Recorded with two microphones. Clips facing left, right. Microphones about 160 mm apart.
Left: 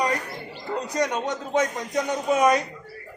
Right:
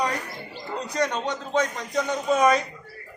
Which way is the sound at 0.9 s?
15° left (ahead or behind).